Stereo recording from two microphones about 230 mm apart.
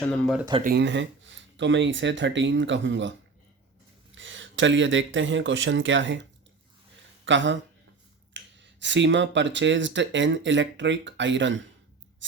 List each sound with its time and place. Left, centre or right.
0.0 s speech: centre
0.6 s speech: right
7.3 s speech: right